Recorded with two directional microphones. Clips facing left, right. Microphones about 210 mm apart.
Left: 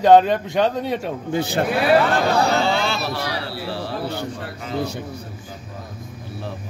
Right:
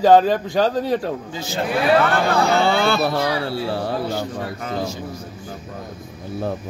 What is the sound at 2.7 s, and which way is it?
Speech, 55° right (ahead or behind).